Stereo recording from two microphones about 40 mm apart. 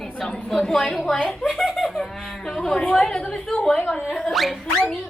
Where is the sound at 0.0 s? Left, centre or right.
Centre.